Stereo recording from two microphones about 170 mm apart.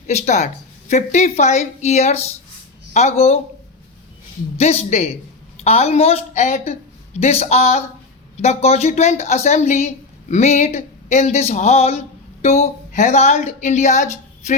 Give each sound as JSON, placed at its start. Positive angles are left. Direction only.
{"t": 0.1, "sound": "speech", "side_deg": 40}
{"t": 4.5, "sound": "speech", "side_deg": 40}